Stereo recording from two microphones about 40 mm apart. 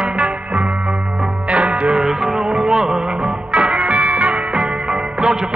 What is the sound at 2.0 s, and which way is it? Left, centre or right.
Music, centre.